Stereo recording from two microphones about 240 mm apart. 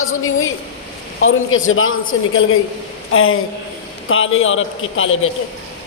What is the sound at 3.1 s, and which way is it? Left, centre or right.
Speech, left.